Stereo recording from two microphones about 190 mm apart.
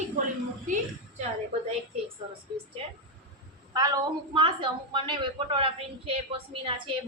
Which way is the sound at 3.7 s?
20° right (ahead or behind).